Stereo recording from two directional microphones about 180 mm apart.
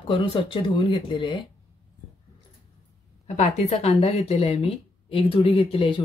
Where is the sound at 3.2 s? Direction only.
40° left (ahead or behind).